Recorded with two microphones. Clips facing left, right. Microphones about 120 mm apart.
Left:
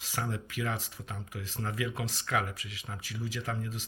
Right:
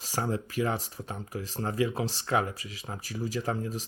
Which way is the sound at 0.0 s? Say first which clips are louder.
Right 5 dB; 35° right (ahead or behind).